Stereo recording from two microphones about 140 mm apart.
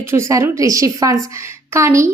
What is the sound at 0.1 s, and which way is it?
A woman's voice, 20° right (ahead or behind).